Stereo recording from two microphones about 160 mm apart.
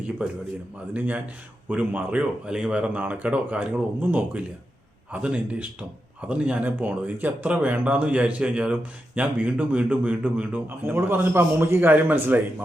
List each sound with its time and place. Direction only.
0.9 s speech: 10° right (ahead or behind)